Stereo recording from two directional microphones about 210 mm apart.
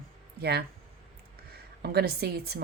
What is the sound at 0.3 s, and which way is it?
Speech, 50° right (ahead or behind).